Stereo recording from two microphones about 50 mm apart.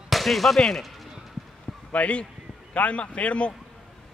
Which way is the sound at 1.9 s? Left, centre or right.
Left.